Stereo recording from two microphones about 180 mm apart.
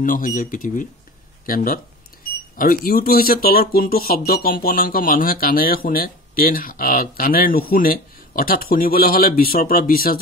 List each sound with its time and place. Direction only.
0.0 s speech: 50° left (ahead or behind)